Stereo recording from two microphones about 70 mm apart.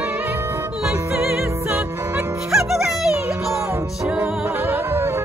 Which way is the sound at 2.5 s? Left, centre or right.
Centre.